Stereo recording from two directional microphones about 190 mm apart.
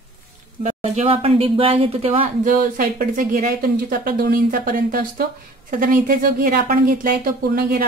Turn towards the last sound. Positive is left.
turn(degrees=-50)  # may be behind; listen again after turning